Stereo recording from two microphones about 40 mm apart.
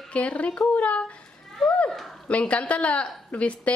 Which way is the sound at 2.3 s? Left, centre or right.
Left.